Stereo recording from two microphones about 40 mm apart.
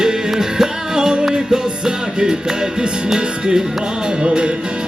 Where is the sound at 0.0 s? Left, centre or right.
Centre.